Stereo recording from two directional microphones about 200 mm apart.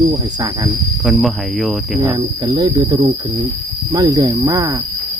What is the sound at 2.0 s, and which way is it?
Speech, 20° right (ahead or behind).